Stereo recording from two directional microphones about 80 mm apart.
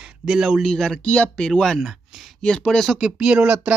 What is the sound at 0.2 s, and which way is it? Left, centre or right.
Speech, centre.